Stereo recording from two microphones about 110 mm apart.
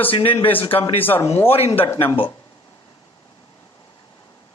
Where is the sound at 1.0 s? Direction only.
20° left (ahead or behind).